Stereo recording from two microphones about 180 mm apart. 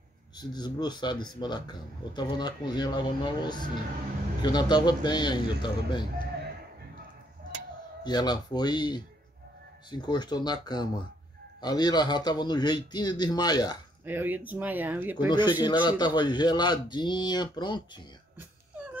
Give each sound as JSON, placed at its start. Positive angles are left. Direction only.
{"t": 0.4, "sound": "a man's voice", "side_deg": 25}
{"t": 8.0, "sound": "a man's voice", "side_deg": 25}
{"t": 14.0, "sound": "speech", "side_deg": -10}
{"t": 15.6, "sound": "a man's voice", "side_deg": 25}